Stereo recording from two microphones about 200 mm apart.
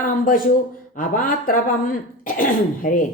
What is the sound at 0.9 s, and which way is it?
A woman's voice, 45° left (ahead or behind).